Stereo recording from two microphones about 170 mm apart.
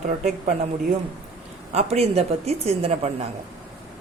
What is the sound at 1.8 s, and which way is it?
A woman's voice, 40° right (ahead or behind).